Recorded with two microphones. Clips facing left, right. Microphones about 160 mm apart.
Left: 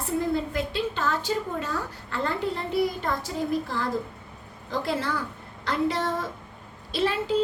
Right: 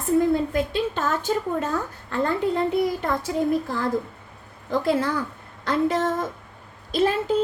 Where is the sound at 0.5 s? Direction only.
50° right (ahead or behind).